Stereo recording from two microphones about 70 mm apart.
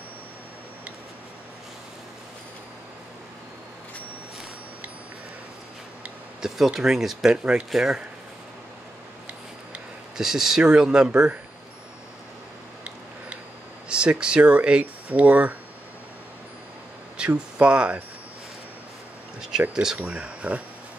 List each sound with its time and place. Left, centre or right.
6.4 s speech: centre
10.1 s speech: centre
13.8 s speech: centre
17.2 s speech: centre
19.7 s speech: centre
20.0 s speech: centre